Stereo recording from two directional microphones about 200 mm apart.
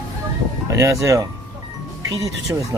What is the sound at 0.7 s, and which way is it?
Speech, 15° right (ahead or behind).